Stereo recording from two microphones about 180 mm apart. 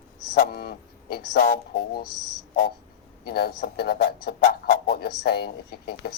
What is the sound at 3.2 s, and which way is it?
Speech, 60° left (ahead or behind).